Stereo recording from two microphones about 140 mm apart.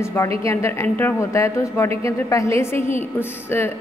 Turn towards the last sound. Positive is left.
turn(degrees=15)  # may be behind; listen again after turning